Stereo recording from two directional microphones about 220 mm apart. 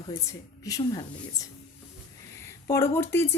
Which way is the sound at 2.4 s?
10° left (ahead or behind).